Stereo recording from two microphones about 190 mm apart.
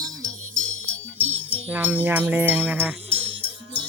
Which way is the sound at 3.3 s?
10° left (ahead or behind).